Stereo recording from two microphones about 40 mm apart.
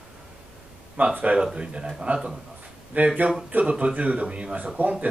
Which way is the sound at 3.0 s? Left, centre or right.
Right.